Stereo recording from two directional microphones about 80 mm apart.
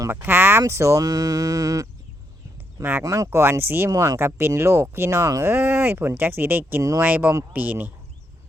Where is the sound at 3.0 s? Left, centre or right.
Right.